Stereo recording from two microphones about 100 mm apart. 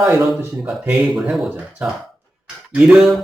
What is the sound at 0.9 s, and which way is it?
Speech, 5° right (ahead or behind).